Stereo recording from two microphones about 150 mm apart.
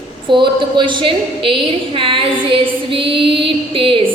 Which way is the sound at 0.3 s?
35° right (ahead or behind).